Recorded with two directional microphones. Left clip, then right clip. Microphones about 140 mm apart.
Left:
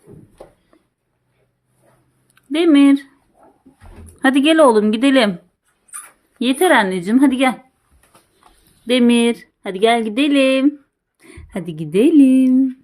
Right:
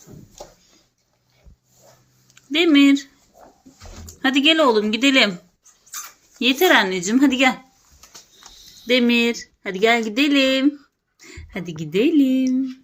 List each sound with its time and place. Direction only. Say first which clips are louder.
2.3 s speech: left 2 dB; 40° left (ahead or behind)
4.2 s speech: left 4 dB; 55° left (ahead or behind)
6.4 s speech: left 2 dB; 45° left (ahead or behind)
8.9 s speech: left 3 dB; 35° left (ahead or behind)
11.2 s a sound: right 1 dB; 25° left (ahead or behind)
11.5 s speech: left 4 dB; 50° left (ahead or behind); by 12.6 s 70° left (ahead or behind)